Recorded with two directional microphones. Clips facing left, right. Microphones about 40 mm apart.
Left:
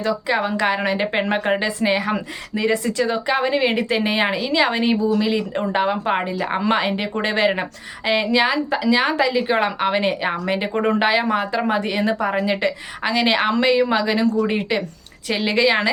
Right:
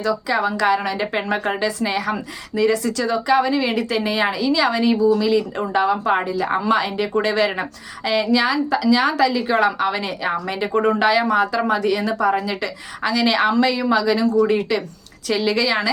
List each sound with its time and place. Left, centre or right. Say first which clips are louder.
0.0 s a woman's voice: right 1 dB; left